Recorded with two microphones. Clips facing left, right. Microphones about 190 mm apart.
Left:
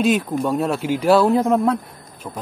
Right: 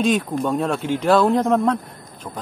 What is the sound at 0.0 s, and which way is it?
Speech, 5° left (ahead or behind).